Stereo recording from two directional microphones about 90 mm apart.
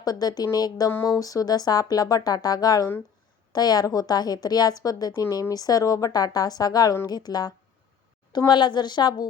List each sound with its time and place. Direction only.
0.0 s speech: 45° left (ahead or behind)